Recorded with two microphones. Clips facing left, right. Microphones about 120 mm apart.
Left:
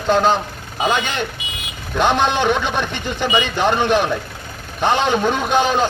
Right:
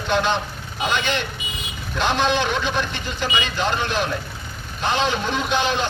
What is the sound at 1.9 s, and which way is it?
A man's voice, 55° left (ahead or behind).